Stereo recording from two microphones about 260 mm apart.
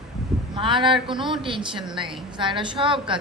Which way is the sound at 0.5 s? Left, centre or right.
Centre.